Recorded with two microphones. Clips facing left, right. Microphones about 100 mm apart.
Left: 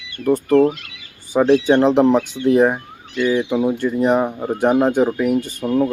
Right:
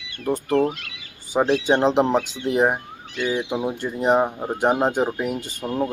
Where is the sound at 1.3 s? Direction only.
25° right (ahead or behind).